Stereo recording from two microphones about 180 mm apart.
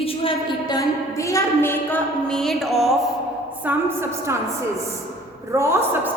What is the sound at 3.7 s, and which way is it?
Speech, 15° right (ahead or behind).